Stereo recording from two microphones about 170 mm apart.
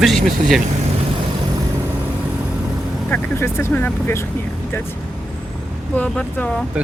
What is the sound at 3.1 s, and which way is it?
Speech, 15° left (ahead or behind).